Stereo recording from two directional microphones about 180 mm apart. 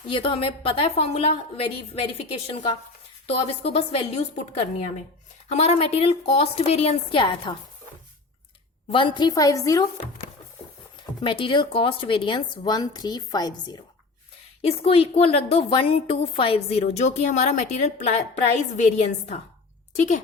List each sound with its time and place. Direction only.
0.1 s a woman's voice: 30° left (ahead or behind)
8.9 s speech: 25° left (ahead or behind)
11.2 s speech: 30° left (ahead or behind)
14.6 s a woman's voice: 35° left (ahead or behind)